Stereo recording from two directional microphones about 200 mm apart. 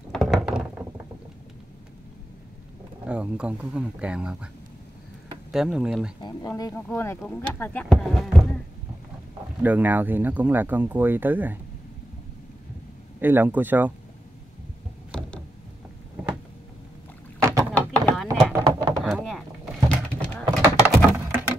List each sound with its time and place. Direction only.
0.1 s a sound: centre (ahead or behind)
3.1 s speech: 5° right (ahead or behind)
5.5 s speech: 5° right (ahead or behind)
6.2 s speech: 15° left (ahead or behind); by 8.5 s centre (ahead or behind)
9.6 s speech: 10° right (ahead or behind)
13.2 s speech: 10° right (ahead or behind)
15.0 s a sound: 5° left (ahead or behind)
17.4 s rowboat: 15° right (ahead or behind)
17.7 s knock: 5° left (ahead or behind)
18.5 s a sound: 15° right (ahead or behind)
19.0 s a sound: centre (ahead or behind)
20.6 s thunk: 10° right (ahead or behind)